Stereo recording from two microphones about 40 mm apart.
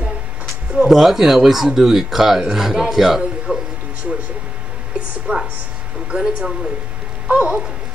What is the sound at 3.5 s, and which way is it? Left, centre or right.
Speech, right.